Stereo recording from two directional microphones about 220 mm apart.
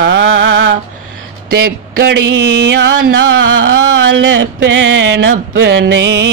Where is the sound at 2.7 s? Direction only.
55° right (ahead or behind).